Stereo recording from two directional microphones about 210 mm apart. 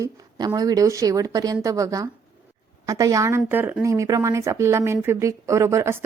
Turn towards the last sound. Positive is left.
turn(degrees=-15)  # may be behind; listen again after turning